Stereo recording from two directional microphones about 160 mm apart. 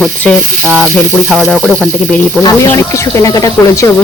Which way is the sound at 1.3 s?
5° left (ahead or behind).